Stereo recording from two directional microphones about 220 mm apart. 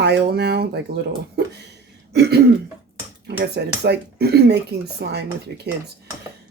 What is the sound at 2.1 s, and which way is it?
Throat clearing, 45° right (ahead or behind).